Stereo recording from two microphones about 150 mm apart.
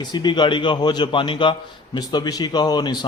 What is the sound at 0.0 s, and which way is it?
A man's voice, 30° left (ahead or behind).